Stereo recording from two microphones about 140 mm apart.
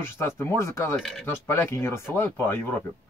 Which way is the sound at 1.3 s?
15° left (ahead or behind).